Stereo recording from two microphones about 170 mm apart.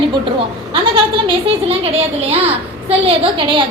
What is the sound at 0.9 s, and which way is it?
A child's voice, 35° right (ahead or behind).